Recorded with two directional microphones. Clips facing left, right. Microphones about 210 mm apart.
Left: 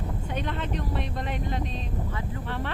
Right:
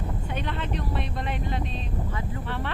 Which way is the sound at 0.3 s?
40° left (ahead or behind).